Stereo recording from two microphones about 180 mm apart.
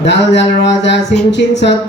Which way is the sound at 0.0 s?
75° left (ahead or behind).